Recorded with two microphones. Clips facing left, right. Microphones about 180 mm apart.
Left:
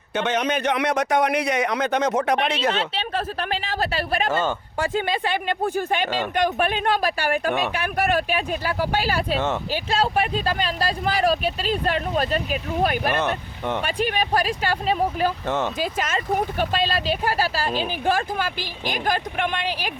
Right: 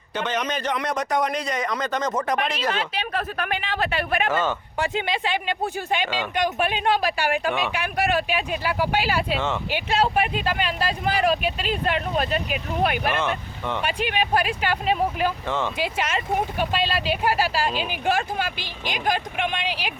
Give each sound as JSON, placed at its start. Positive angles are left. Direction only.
{"t": 0.3, "sound": "speech", "side_deg": 65}
{"t": 2.4, "sound": "speech", "side_deg": 25}
{"t": 4.8, "sound": "speech", "side_deg": 45}